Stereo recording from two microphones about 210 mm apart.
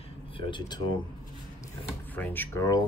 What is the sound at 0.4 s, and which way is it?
Speech, 20° left (ahead or behind).